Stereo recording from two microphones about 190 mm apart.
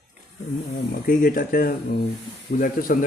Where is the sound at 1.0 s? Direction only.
50° left (ahead or behind).